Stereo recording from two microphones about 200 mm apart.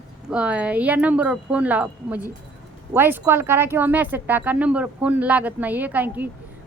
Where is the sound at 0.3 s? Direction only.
5° right (ahead or behind).